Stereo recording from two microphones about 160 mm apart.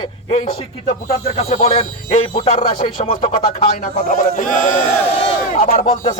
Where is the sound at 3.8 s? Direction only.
55° left (ahead or behind).